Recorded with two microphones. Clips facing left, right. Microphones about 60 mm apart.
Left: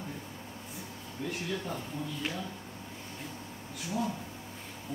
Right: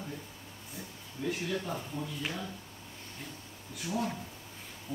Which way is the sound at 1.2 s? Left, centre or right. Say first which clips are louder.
Right 3 dB; centre.